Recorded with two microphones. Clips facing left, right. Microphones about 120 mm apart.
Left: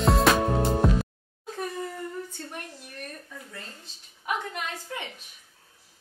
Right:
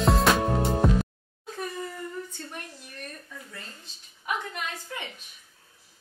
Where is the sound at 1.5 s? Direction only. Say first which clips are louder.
Left 1 dB; 35° left (ahead or behind).